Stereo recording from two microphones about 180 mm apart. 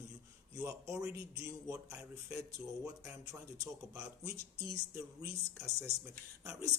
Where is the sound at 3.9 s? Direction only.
15° right (ahead or behind).